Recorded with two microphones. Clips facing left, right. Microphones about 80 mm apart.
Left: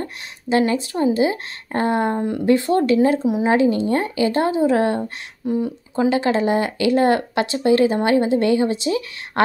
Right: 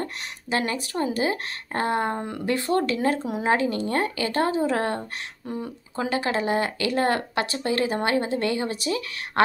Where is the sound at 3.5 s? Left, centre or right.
Left.